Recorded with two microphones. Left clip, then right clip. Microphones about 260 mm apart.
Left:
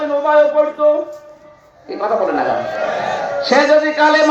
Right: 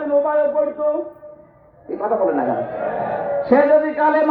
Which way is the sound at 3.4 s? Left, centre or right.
Left.